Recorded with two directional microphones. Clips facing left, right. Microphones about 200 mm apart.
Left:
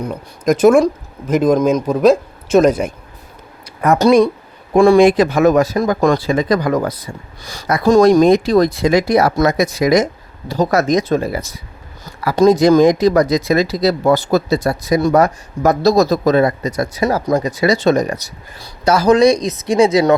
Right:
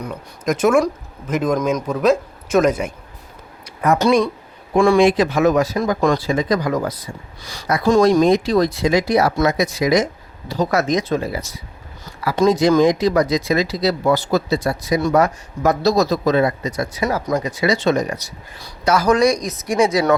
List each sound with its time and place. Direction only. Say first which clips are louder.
0.0 s speech: left 5 dB; 35° left (ahead or behind)
3.8 s speech: left 5 dB; 45° left (ahead or behind); by 6.9 s 60° left (ahead or behind)
7.4 s speech: left 3 dB; 45° left (ahead or behind)
18.6 s speech: left 3 dB; 30° left (ahead or behind)